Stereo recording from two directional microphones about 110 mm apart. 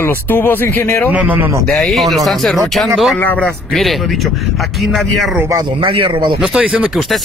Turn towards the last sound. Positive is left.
turn(degrees=-10)  # may be behind; listen again after turning